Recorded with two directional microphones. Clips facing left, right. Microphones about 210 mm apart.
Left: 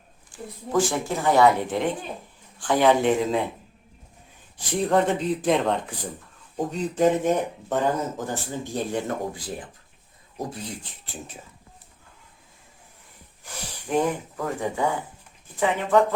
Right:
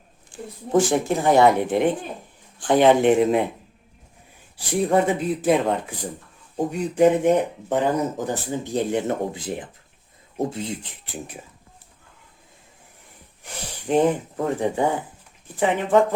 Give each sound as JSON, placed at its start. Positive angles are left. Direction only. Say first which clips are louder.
{"t": 0.3, "sound": "speech", "louder": "right 5 dB", "side_deg": -20}
{"t": 4.5, "sound": "speech", "louder": "right 2 dB", "side_deg": -10}
{"t": 13.4, "sound": "speech", "louder": "right 4 dB", "side_deg": -25}